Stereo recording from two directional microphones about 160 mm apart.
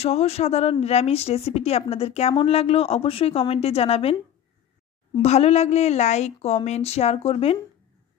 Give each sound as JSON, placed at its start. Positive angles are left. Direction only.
{"t": 0.0, "sound": "a woman's voice", "side_deg": 40}
{"t": 5.2, "sound": "a woman's voice", "side_deg": 45}